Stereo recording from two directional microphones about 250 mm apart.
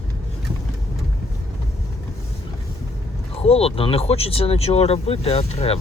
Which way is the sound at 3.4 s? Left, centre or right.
Left.